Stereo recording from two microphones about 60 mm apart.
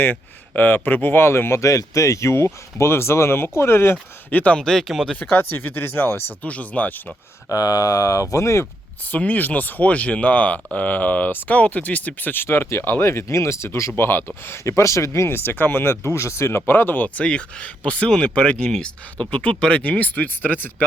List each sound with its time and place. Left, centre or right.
0.0 s speech: left
4.3 s speech: left
4.5 s speech: centre
5.2 s speech: left
6.4 s speech: left
7.5 s speech: left
9.1 s speech: left
17.2 s speech: centre